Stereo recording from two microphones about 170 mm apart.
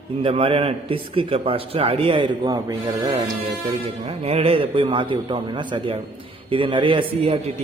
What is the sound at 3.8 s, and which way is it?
Speech, 35° right (ahead or behind).